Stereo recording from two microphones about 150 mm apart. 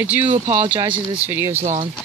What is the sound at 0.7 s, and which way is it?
Speech, 35° right (ahead or behind).